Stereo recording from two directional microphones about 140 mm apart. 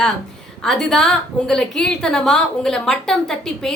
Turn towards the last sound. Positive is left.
turn(degrees=5)  # may be behind; listen again after turning